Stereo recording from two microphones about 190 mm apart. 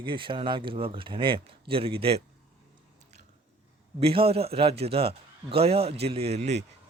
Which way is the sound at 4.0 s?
30° right (ahead or behind).